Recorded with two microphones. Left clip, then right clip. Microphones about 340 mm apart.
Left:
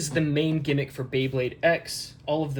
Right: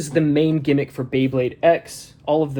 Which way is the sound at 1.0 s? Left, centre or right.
Right.